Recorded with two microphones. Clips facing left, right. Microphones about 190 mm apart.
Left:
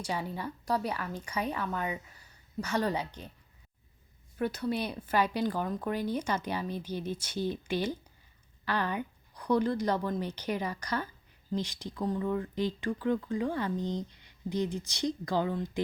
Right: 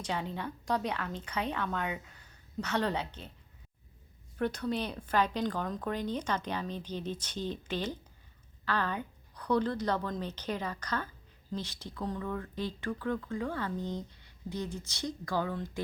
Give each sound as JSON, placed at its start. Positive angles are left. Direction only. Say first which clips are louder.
{"t": 0.0, "sound": "speech", "louder": "left 1 dB", "side_deg": 10}
{"t": 4.4, "sound": "speech", "louder": "left 1 dB", "side_deg": 5}